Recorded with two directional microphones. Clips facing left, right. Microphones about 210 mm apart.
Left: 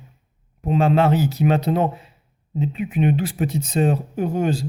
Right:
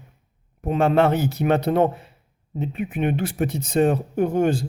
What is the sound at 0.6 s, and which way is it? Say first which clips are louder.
Speech: even; 50° right (ahead or behind).